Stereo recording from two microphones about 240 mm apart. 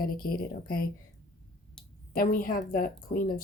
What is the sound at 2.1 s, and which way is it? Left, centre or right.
Speech, left.